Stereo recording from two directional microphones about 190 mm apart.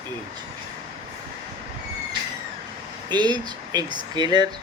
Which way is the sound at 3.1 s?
20° right (ahead or behind).